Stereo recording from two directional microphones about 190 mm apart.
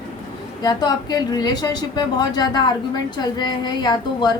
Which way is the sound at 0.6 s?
20° left (ahead or behind).